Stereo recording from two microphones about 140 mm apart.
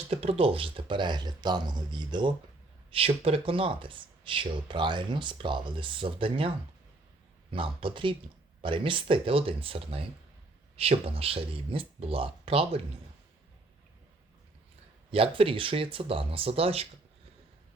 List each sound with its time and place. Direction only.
0.1 s speech: 45° right (ahead or behind)
7.5 s speech: 40° right (ahead or behind)
15.1 s speech: 40° right (ahead or behind)